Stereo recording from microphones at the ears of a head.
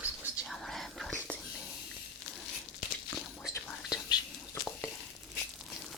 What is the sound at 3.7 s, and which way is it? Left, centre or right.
Whispering, left.